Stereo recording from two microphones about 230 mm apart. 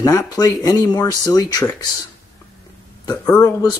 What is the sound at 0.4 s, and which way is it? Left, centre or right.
Speech, centre.